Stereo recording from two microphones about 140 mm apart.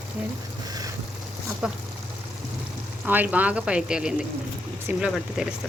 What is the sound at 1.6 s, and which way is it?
Speech, 5° right (ahead or behind).